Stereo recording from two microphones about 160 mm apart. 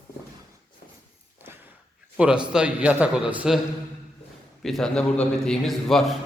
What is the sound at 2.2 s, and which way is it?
A man's voice, 5° right (ahead or behind).